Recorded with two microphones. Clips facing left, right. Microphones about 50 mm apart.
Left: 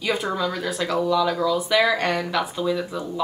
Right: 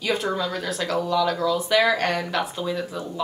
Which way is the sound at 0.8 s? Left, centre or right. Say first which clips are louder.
Left 3 dB; centre.